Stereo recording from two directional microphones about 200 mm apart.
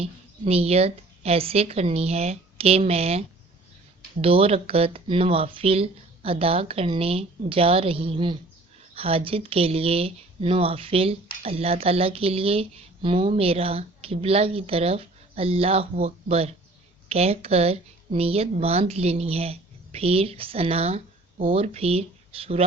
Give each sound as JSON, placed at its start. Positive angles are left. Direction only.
{"t": 0.0, "sound": "a woman's voice", "side_deg": -30}